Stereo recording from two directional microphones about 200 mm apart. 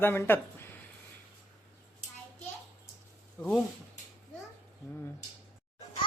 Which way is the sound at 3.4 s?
15° left (ahead or behind).